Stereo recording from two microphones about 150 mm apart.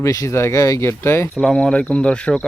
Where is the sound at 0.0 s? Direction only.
20° left (ahead or behind).